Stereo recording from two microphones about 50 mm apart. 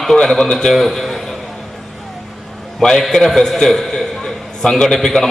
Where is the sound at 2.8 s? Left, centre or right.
Centre.